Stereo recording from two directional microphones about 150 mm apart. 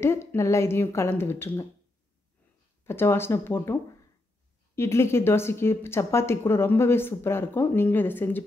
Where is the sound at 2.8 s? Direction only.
15° left (ahead or behind).